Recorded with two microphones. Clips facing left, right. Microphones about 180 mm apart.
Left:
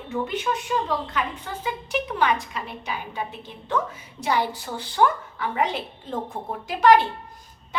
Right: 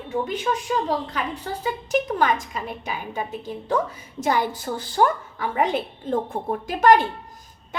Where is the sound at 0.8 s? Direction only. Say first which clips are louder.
Right 1 dB; 40° right (ahead or behind).